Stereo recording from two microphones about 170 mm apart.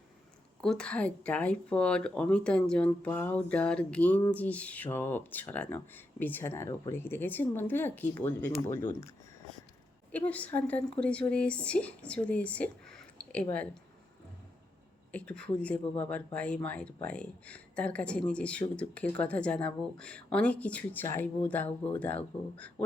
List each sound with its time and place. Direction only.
0.6 s speech: 5° left (ahead or behind)
10.1 s speech: 10° left (ahead or behind)
15.1 s speech: 5° left (ahead or behind)